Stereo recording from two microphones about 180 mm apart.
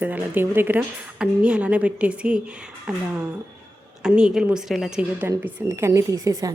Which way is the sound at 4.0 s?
5° right (ahead or behind).